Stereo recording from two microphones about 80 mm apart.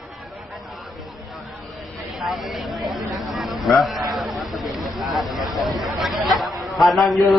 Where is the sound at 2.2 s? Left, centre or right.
Centre.